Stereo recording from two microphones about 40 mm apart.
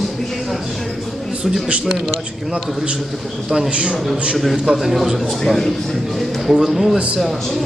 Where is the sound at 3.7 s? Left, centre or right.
Right.